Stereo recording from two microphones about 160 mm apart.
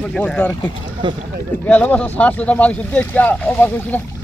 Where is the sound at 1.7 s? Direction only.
10° left (ahead or behind).